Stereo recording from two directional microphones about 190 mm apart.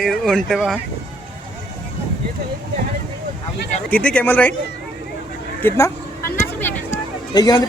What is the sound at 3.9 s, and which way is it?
Speech, 5° left (ahead or behind).